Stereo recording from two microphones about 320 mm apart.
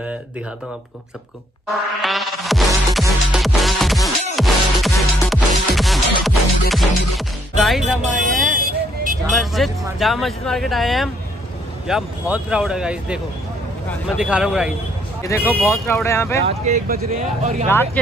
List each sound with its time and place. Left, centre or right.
1.7 s music: centre
8.5 s vehicle: right
9.3 s speech: centre
15.2 s speech: centre
16.4 s speech: right
17.6 s speech: centre